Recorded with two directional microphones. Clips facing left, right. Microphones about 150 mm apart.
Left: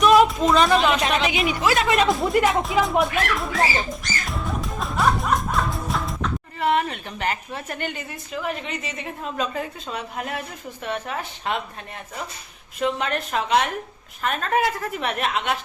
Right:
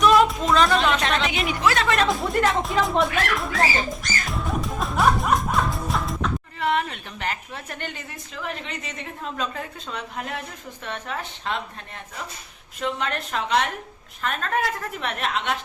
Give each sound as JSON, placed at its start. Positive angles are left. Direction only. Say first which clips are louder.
{"t": 0.0, "sound": "a woman's voice", "louder": "left 2 dB", "side_deg": 0}
{"t": 12.8, "sound": "a woman's voice", "louder": "left 3 dB", "side_deg": 5}